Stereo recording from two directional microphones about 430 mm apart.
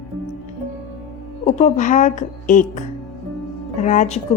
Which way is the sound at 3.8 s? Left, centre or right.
Centre.